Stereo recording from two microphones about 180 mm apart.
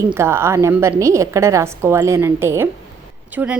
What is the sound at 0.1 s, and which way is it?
Speech, 15° right (ahead or behind).